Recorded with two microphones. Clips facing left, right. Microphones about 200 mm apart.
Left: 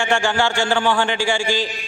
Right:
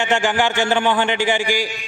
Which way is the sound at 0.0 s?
20° right (ahead or behind).